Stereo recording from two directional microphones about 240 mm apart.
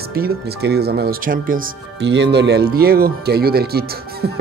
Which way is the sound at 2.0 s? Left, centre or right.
Right.